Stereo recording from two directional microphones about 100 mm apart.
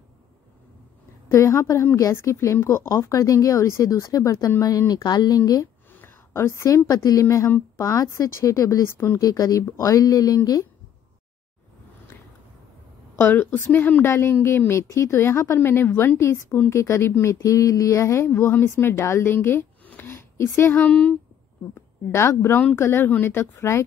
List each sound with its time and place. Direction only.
1.3 s a woman's voice: 30° left (ahead or behind)
5.9 s a woman's voice: 20° left (ahead or behind)
7.4 s a woman's voice: 20° left (ahead or behind)
9.2 s a woman's voice: 35° left (ahead or behind)
13.2 s a woman's voice: 20° left (ahead or behind)
20.1 s a sound: 30° left (ahead or behind)
20.7 s speech: 15° left (ahead or behind)
21.7 s a woman's voice: 25° left (ahead or behind)